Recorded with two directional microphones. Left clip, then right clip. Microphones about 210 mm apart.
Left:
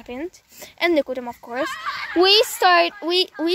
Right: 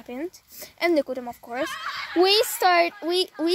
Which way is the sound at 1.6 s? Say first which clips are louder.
Left 4 dB; 50° left (ahead or behind).